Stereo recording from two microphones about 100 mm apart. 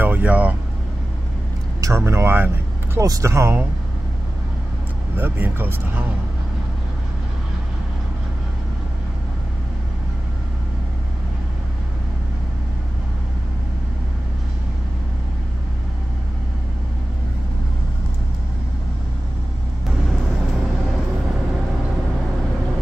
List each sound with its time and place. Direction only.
0.0 s speech: 15° right (ahead or behind)
1.8 s speech: 30° right (ahead or behind)
5.1 s speech: 20° right (ahead or behind)